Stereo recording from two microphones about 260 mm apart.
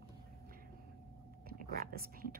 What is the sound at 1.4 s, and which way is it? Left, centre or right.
Whispering, right.